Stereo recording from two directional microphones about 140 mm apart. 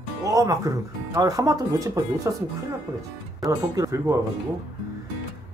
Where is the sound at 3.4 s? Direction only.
25° right (ahead or behind).